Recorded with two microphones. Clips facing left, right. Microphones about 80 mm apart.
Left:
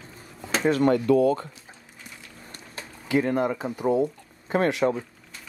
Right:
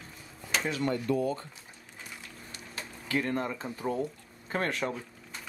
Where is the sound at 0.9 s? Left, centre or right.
Left.